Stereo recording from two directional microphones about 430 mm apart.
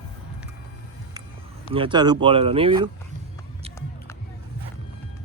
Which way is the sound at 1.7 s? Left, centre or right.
Centre.